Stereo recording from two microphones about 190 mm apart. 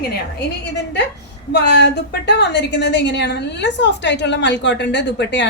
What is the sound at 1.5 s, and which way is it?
A woman's voice, 65° left (ahead or behind).